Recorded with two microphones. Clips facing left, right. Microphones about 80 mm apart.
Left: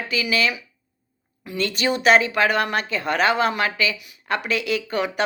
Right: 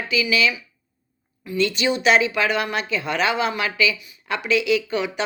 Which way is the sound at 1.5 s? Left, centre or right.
Left.